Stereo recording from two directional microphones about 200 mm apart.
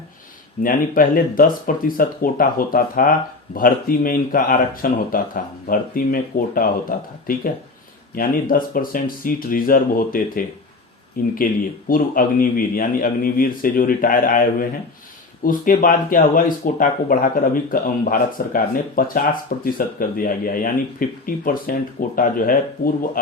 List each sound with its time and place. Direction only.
0.6 s speech: 45° left (ahead or behind)
8.1 s speech: 45° left (ahead or behind)